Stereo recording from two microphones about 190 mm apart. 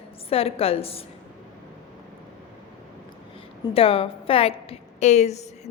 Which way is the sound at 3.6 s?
30° left (ahead or behind).